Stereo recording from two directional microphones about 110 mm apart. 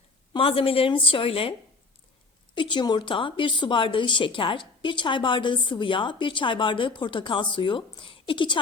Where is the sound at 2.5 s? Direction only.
45° left (ahead or behind).